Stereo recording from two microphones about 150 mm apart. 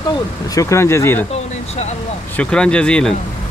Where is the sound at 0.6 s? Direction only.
20° left (ahead or behind).